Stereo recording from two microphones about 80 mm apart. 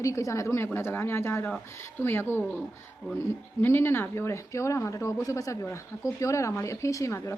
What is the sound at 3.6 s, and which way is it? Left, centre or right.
Speech, left.